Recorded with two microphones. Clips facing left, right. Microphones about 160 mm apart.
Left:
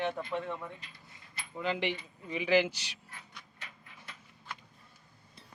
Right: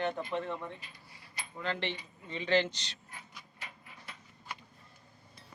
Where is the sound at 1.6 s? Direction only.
15° left (ahead or behind).